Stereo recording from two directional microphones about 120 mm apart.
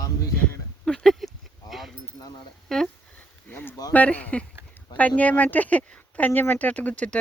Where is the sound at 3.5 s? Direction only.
15° left (ahead or behind).